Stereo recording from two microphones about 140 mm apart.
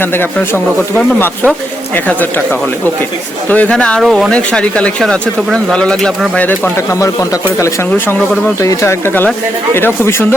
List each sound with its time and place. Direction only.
0.0 s speech: 15° left (ahead or behind)